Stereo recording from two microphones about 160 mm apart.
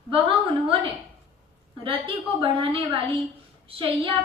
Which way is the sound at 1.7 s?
35° right (ahead or behind).